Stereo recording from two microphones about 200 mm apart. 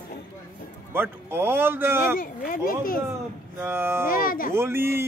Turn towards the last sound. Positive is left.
turn(degrees=-10)  # may be behind; listen again after turning